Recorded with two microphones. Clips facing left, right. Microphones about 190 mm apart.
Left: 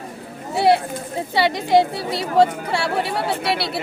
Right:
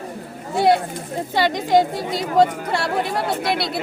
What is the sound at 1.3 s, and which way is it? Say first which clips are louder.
A woman's voice: even; 5° left (ahead or behind).